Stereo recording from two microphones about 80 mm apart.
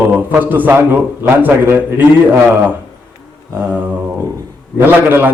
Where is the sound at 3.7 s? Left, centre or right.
Right.